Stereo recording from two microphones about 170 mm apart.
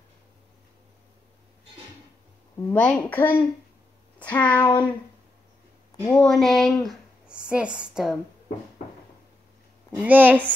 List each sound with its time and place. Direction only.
2.7 s a woman's voice: 5° left (ahead or behind)
4.6 s a sound: 25° left (ahead or behind)
6.0 s speech: 5° left (ahead or behind)
9.9 s a woman's voice: 10° right (ahead or behind)